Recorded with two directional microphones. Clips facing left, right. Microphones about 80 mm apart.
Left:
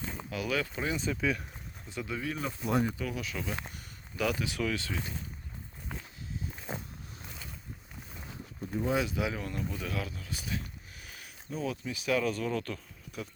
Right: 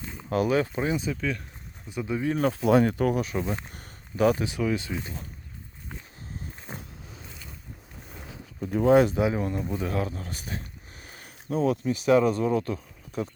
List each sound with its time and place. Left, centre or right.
0.4 s speech: right
1.1 s speech: centre
1.9 s speech: right
2.4 s speech: right
2.9 s speech: right
3.3 s speech: right
3.8 s a sound: right
4.5 s speech: right
8.7 s speech: right
9.1 s speech: right
11.4 s speech: right
12.0 s speech: right